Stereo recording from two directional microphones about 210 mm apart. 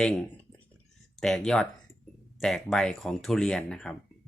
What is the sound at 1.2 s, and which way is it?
Speech, 5° left (ahead or behind).